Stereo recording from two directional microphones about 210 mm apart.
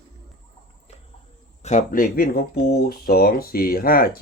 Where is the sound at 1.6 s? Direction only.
35° left (ahead or behind).